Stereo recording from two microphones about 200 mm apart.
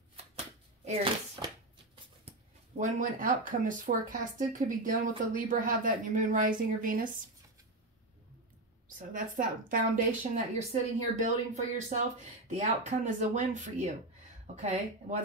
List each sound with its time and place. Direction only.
0.8 s speech: 30° right (ahead or behind)
1.4 s shuffling cards: 20° right (ahead or behind)
2.8 s a woman's voice: 40° right (ahead or behind)
8.8 s a woman's voice: 40° right (ahead or behind)